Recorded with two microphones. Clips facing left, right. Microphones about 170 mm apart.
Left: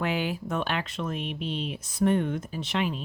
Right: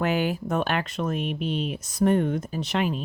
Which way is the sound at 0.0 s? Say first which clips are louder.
Right 4 dB; 45° right (ahead or behind).